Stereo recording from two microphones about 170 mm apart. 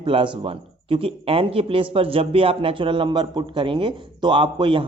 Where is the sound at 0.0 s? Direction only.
30° right (ahead or behind).